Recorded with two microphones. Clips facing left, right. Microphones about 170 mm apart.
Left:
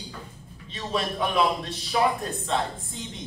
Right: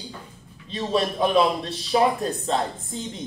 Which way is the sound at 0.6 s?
30° right (ahead or behind).